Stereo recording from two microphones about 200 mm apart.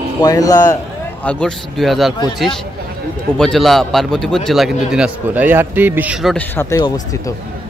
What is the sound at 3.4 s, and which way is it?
A man's voice, centre (ahead or behind).